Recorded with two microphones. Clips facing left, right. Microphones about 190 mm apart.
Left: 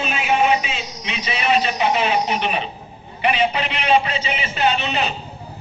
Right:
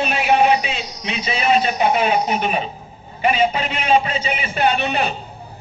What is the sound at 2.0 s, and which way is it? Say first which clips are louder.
A man's voice: right 2 dB; 45° right (ahead or behind).